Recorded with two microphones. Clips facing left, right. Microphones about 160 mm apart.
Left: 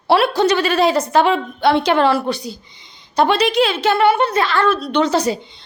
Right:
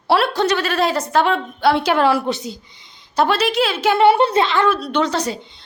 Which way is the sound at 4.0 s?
30° right (ahead or behind).